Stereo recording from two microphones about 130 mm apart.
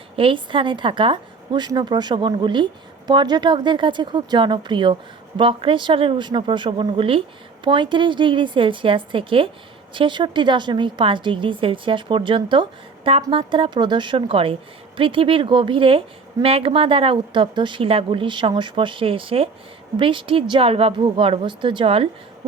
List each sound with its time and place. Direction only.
0.2 s a woman's voice: 40° right (ahead or behind)